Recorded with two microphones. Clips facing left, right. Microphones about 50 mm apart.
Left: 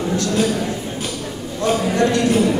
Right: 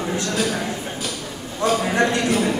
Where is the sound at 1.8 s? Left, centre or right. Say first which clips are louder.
Left 3 dB; right.